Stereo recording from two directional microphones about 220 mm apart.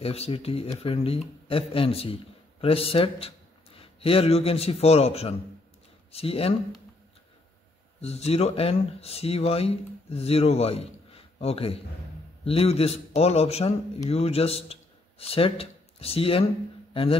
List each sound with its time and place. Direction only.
0.0 s a man's voice: 25° left (ahead or behind)
8.0 s a man's voice: 30° left (ahead or behind)